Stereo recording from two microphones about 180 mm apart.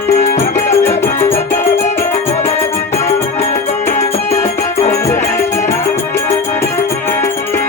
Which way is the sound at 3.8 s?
40° left (ahead or behind).